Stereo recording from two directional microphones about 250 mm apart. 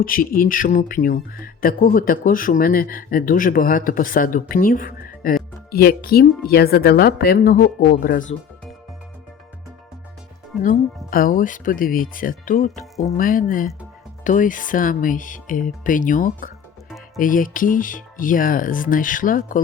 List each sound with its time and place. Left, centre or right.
0.0 s speech: left
10.6 s speech: left